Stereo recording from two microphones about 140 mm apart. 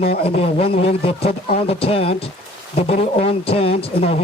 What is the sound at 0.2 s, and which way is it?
Speech, 45° left (ahead or behind).